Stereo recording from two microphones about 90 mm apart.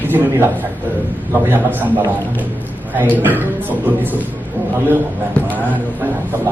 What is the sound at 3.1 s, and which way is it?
A man's voice, 20° right (ahead or behind).